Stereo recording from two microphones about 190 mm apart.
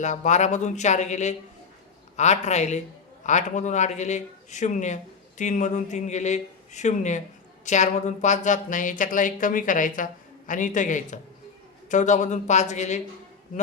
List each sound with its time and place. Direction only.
0.0 s a man's voice: 40° left (ahead or behind)